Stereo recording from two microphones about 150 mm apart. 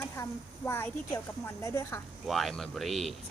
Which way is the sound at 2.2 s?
Centre (ahead or behind).